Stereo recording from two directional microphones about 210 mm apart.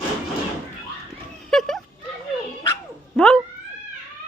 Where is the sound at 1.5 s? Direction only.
Centre (ahead or behind).